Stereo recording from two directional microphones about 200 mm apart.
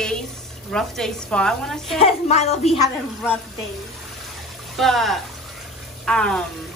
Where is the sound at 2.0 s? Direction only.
30° left (ahead or behind).